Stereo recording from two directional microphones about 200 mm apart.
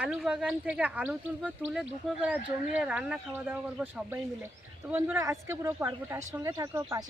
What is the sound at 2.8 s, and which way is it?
Speech, 5° right (ahead or behind).